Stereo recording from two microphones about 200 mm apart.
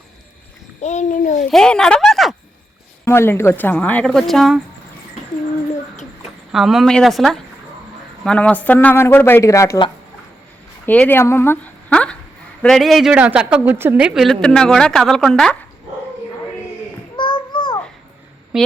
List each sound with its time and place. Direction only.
0.8 s a child's voice: 35° left (ahead or behind)
1.5 s speech: 5° left (ahead or behind)
3.0 s speech: 10° left (ahead or behind)
6.5 s a woman's voice: centre (ahead or behind); by 9.9 s 20° left (ahead or behind)
10.8 s a woman's voice: 10° left (ahead or behind)
17.2 s a sound: 25° left (ahead or behind)
18.5 s a sound: 5° right (ahead or behind)